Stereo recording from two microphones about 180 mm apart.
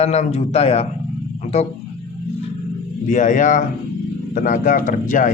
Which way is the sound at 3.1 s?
45° left (ahead or behind).